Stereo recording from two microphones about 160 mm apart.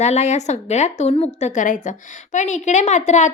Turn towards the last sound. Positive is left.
turn(degrees=45)  # may be behind; listen again after turning